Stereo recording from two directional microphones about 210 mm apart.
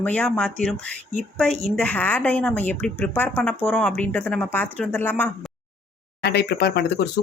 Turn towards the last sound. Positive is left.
turn(degrees=50)  # may be behind; listen again after turning